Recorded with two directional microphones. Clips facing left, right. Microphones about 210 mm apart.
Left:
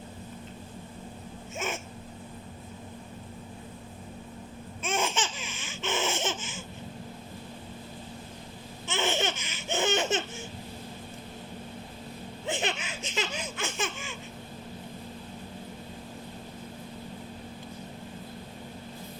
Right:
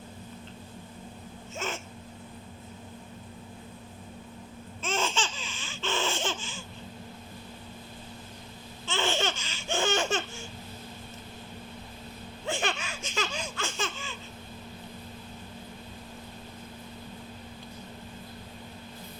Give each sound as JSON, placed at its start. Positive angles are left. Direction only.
{"t": 1.5, "sound": "a sound", "side_deg": 15}
{"t": 4.8, "sound": "laughter", "side_deg": 15}
{"t": 8.9, "sound": "laughter", "side_deg": 20}
{"t": 12.5, "sound": "laughter", "side_deg": 20}